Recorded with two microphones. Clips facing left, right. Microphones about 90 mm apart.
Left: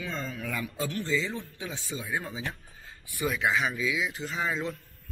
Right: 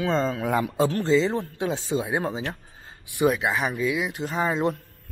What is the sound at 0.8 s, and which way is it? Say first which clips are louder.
A man's voice: right 7 dB; 40° right (ahead or behind).